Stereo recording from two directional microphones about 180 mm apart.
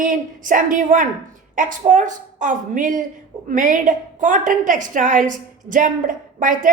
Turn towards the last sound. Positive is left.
turn(degrees=-45)  # may be behind; listen again after turning